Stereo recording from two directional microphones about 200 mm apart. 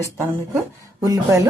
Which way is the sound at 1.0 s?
15° right (ahead or behind).